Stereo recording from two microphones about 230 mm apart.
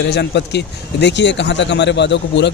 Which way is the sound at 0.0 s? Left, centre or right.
Left.